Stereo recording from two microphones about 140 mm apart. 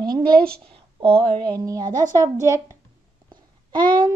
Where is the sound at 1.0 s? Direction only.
45° right (ahead or behind).